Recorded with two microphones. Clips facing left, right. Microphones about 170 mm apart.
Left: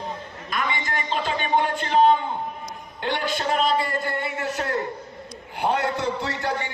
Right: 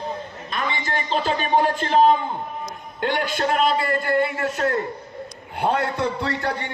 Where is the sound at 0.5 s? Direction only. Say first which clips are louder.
Right 1 dB; 30° right (ahead or behind).